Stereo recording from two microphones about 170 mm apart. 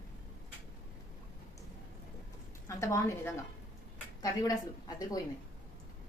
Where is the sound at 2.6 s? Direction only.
15° left (ahead or behind).